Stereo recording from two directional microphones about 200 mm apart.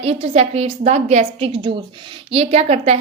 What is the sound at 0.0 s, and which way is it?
A woman's voice, 30° right (ahead or behind).